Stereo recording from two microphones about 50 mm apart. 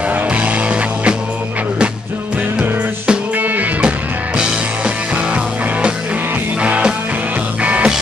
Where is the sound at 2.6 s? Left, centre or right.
Centre.